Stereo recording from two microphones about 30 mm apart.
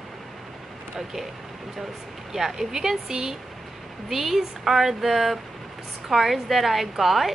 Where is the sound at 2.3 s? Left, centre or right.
Centre.